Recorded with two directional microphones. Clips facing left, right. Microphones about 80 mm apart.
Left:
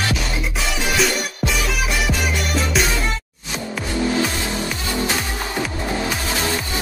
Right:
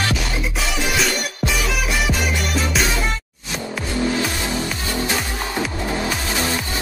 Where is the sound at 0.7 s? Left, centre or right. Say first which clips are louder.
Left 2 dB; centre.